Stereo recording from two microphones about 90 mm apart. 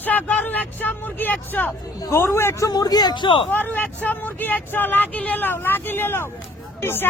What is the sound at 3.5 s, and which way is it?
Speech, 20° left (ahead or behind).